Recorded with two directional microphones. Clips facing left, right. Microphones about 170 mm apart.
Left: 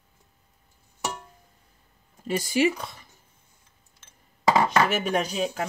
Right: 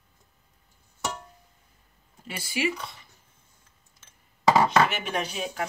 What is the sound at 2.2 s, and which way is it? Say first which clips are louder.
Speech: left 7 dB; 40° left (ahead or behind).